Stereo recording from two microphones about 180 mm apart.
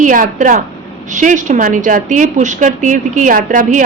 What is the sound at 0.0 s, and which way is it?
A woman's voice, 45° right (ahead or behind).